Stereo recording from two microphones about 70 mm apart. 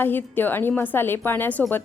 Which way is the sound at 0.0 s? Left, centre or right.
Left.